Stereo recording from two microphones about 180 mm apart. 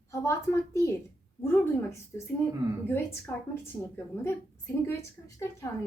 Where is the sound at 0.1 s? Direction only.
15° left (ahead or behind).